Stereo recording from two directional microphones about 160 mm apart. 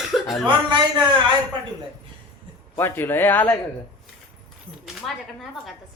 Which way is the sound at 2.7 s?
15° left (ahead or behind).